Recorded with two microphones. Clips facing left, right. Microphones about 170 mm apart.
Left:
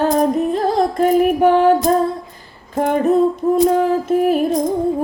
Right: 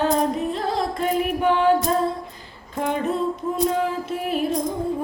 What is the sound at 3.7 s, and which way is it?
Music, 45° left (ahead or behind).